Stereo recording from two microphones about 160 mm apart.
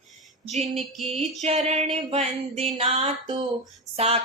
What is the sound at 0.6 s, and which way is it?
Music, centre (ahead or behind).